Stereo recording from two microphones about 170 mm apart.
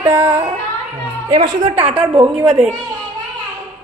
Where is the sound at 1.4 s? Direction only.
25° right (ahead or behind).